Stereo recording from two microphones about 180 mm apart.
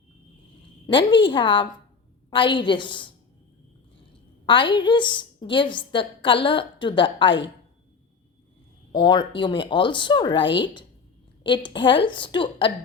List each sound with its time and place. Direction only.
0.9 s a woman's voice: 25° left (ahead or behind)
4.4 s a woman's voice: 25° left (ahead or behind)
8.9 s a woman's voice: 25° left (ahead or behind)